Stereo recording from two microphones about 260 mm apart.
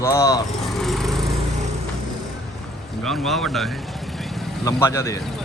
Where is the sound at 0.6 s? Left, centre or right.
Centre.